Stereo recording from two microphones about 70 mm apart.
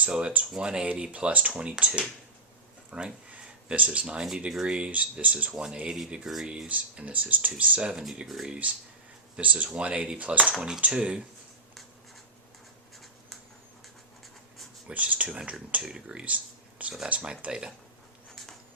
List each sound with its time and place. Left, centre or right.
0.1 s speech: centre
6.7 s speech: right
8.3 s speech: centre
9.3 s speech: right
14.8 s speech: right